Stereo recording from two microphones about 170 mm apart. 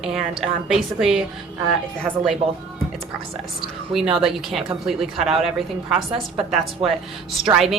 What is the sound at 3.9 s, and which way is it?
A woman's voice, centre (ahead or behind).